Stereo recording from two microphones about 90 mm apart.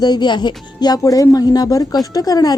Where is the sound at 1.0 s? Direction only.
40° left (ahead or behind).